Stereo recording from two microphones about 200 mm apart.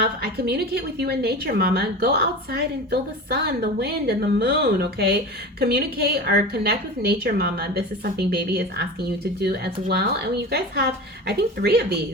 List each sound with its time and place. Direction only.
0.0 s a woman's voice: 50° right (ahead or behind)